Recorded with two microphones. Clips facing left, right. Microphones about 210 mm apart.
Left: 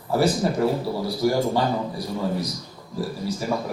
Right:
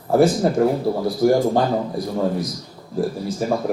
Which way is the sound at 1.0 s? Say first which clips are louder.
Right 5 dB; 50° right (ahead or behind).